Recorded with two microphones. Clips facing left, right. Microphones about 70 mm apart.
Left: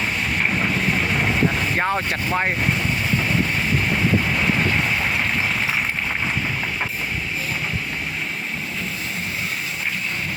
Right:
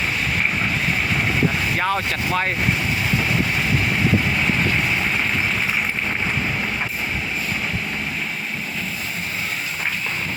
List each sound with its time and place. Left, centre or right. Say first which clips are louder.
1.8 s speech: right 1 dB; centre